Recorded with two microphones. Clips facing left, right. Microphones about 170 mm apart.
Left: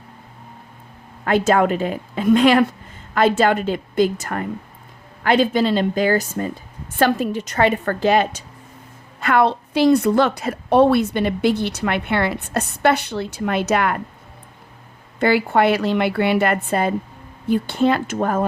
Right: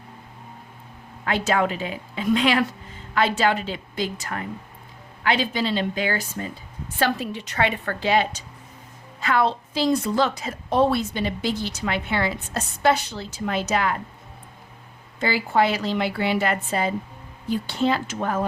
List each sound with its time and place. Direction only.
1.2 s a woman's voice: 50° left (ahead or behind)
15.2 s a woman's voice: 60° left (ahead or behind)